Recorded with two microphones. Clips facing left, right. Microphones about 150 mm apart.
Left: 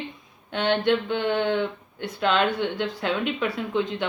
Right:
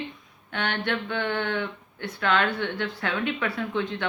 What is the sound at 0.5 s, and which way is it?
Speech, 20° left (ahead or behind).